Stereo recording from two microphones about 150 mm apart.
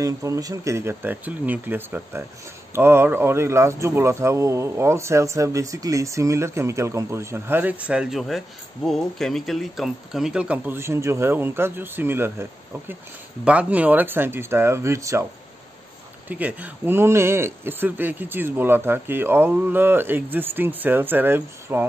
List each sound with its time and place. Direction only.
0.0 s speech: 20° right (ahead or behind)
16.3 s speech: 10° right (ahead or behind)